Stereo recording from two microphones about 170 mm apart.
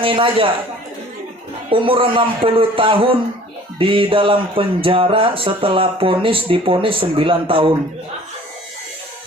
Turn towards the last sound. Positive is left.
turn(degrees=-30)  # may be behind; listen again after turning